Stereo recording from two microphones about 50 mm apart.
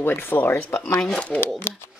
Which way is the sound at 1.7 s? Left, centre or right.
Left.